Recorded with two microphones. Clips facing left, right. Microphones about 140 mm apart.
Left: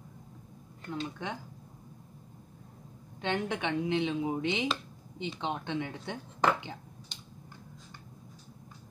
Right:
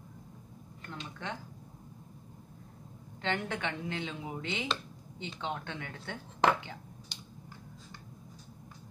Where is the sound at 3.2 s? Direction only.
15° left (ahead or behind).